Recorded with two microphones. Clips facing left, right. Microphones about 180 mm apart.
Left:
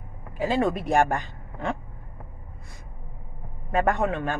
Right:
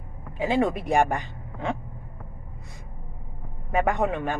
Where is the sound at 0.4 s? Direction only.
15° right (ahead or behind).